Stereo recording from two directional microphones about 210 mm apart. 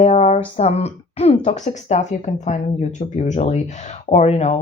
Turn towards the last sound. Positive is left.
turn(degrees=30)  # may be behind; listen again after turning